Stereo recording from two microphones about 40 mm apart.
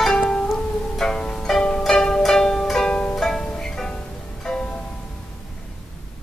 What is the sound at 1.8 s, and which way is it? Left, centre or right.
Music, centre.